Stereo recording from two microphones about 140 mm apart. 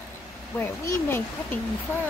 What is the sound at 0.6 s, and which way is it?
Speech, 15° left (ahead or behind).